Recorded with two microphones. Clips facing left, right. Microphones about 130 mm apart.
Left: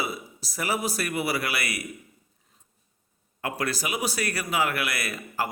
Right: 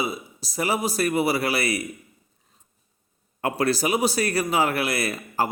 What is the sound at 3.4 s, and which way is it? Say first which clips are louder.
A man's voice: right 7 dB; 30° right (ahead or behind).